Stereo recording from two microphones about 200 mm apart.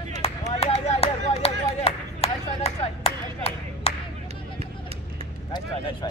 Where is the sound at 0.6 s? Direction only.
30° left (ahead or behind).